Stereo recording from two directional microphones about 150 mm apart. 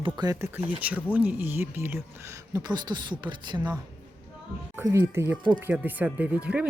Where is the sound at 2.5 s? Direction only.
30° right (ahead or behind).